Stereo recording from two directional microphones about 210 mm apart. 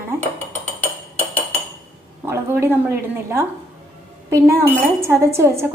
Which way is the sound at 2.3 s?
10° right (ahead or behind).